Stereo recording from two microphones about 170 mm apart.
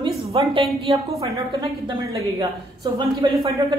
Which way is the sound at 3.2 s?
25° right (ahead or behind).